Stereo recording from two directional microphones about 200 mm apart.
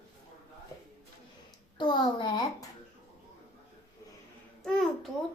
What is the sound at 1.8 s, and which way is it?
Speech, 25° left (ahead or behind).